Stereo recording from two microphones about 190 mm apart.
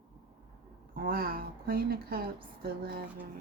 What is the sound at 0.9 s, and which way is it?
Speech, 50° right (ahead or behind).